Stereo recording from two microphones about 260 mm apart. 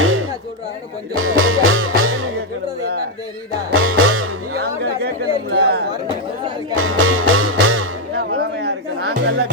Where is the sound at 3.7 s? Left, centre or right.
Right.